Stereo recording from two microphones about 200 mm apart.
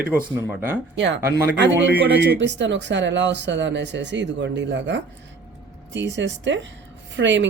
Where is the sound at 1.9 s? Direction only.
55° right (ahead or behind).